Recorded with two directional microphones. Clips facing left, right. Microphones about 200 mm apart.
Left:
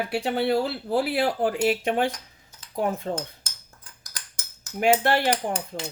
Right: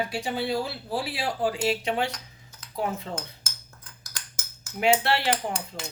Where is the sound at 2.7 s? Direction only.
50° left (ahead or behind).